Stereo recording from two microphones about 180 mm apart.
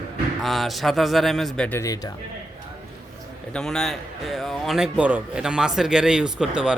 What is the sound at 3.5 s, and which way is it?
A man's voice, 5° left (ahead or behind).